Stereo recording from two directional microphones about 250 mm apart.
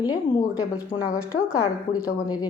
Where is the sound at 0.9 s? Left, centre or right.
Centre.